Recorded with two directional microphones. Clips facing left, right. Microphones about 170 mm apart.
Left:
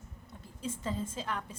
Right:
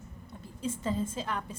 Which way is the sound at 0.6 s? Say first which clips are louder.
Right 4 dB; 20° right (ahead or behind).